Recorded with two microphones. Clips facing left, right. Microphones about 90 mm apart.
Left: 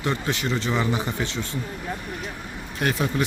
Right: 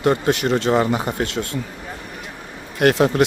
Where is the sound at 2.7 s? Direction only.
70° right (ahead or behind).